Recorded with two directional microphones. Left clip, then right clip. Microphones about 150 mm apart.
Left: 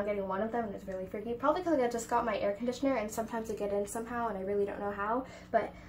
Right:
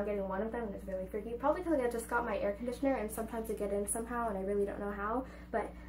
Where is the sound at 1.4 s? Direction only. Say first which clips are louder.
Left 3 dB; 5° left (ahead or behind).